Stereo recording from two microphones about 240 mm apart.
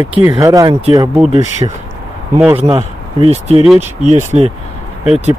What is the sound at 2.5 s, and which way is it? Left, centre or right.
Speech, right.